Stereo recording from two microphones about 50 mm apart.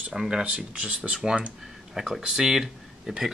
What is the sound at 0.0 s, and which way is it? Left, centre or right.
Speech, centre.